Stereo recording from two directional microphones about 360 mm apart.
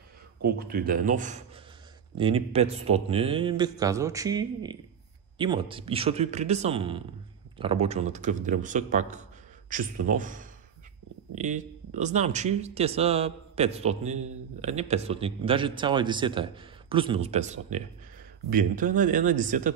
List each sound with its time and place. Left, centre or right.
0.4 s a man's voice: right